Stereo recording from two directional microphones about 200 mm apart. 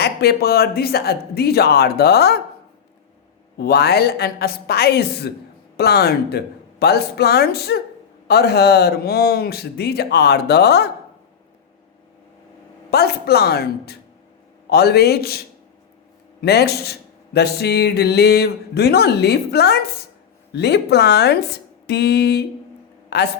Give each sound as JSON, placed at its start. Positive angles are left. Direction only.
{"t": 0.0, "sound": "speech", "side_deg": 50}
{"t": 3.6, "sound": "speech", "side_deg": 55}
{"t": 12.9, "sound": "a man's voice", "side_deg": 50}